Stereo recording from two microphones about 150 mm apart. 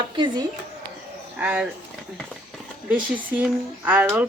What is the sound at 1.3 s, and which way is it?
Speech, 10° right (ahead or behind).